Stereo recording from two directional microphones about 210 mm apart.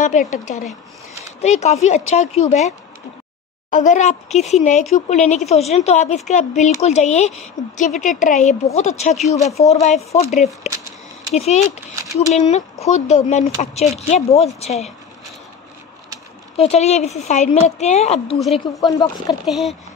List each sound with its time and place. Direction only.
0.0 s speech: 35° left (ahead or behind)
3.7 s speech: 35° left (ahead or behind)
16.5 s speech: 30° left (ahead or behind)
18.4 s speech: centre (ahead or behind)
18.9 s speech: 15° left (ahead or behind)
19.4 s speech: centre (ahead or behind)